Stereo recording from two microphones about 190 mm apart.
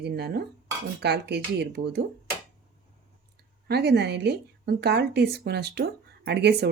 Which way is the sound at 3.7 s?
60° right (ahead or behind).